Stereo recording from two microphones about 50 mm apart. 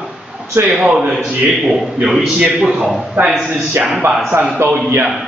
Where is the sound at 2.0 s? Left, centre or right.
Centre.